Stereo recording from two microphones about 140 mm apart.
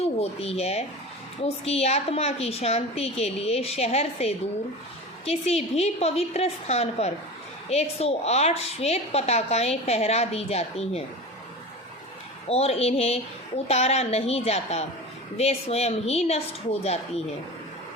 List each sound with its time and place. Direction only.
0.0 s a woman's voice: 45° left (ahead or behind)
12.5 s a woman's voice: 45° left (ahead or behind)